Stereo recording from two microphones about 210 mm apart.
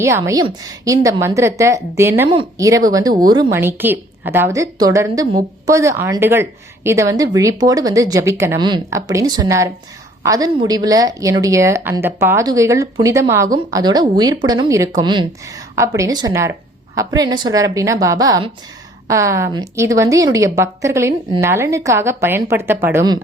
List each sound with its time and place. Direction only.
0.3 s a woman's voice: 20° right (ahead or behind)